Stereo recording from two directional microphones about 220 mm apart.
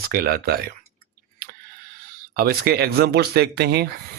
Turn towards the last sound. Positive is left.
turn(degrees=-50)  # may be behind; listen again after turning